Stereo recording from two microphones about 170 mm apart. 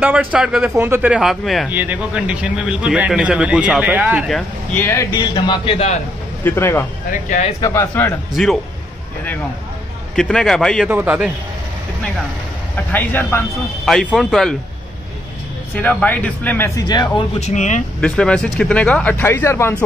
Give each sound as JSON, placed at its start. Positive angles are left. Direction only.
{"t": 0.0, "sound": "a man's voice", "side_deg": -5}
{"t": 4.3, "sound": "speech", "side_deg": 5}
{"t": 5.3, "sound": "speech", "side_deg": 30}
{"t": 6.4, "sound": "speech", "side_deg": 15}
{"t": 7.1, "sound": "speech", "side_deg": 45}
{"t": 7.6, "sound": "speech", "side_deg": 15}
{"t": 8.3, "sound": "a man's voice", "side_deg": 0}
{"t": 10.1, "sound": "a man's voice", "side_deg": 5}
{"t": 10.9, "sound": "a man's voice", "side_deg": -10}
{"t": 12.7, "sound": "speech", "side_deg": 10}
{"t": 13.8, "sound": "a man's voice", "side_deg": 0}
{"t": 15.7, "sound": "speech", "side_deg": 10}
{"t": 17.4, "sound": "speech", "side_deg": 45}
{"t": 18.0, "sound": "speech", "side_deg": 5}